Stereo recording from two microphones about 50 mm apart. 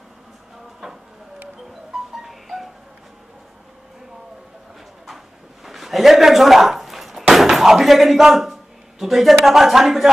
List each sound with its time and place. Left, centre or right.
1.7 s music: centre
5.0 s a sound: centre
9.0 s speech: centre